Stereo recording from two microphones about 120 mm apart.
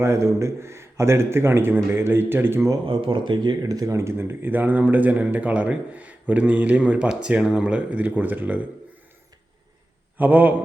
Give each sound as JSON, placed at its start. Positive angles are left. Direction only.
{"t": 0.0, "sound": "speech", "side_deg": -25}
{"t": 2.8, "sound": "speech", "side_deg": -50}
{"t": 10.2, "sound": "speech", "side_deg": -15}